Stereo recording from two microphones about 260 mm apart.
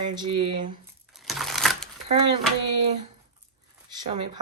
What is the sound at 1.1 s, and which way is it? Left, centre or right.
Crushing, centre.